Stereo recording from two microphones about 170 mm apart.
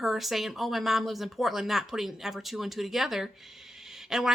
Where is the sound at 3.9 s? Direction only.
Centre (ahead or behind).